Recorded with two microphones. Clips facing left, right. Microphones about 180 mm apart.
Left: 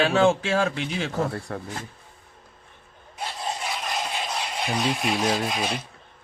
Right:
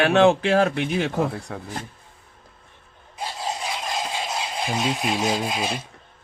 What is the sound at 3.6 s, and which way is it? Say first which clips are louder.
Rattle: right 1 dB; 15° right (ahead or behind).